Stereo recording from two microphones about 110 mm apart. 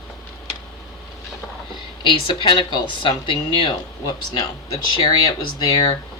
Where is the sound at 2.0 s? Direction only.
45° left (ahead or behind).